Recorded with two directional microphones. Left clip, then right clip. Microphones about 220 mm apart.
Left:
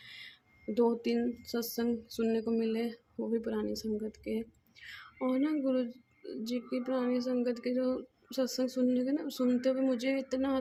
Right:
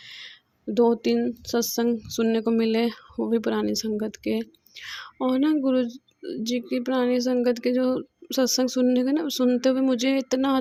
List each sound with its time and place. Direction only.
0.0 s speech: 30° right (ahead or behind)